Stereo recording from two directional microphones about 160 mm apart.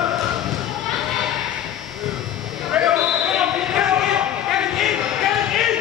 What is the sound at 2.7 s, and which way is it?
Basketball bounce, 5° right (ahead or behind).